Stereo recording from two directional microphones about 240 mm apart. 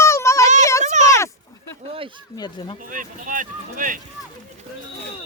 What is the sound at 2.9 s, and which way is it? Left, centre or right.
Speech, right.